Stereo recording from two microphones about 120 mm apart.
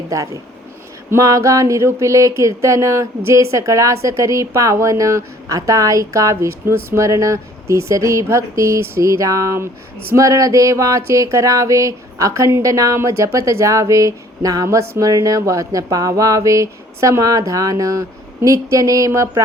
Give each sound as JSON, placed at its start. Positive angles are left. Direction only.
{"t": 1.1, "sound": "speech", "side_deg": -25}